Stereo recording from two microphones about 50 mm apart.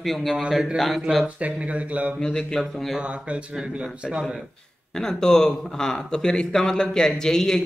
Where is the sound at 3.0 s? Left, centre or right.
Right.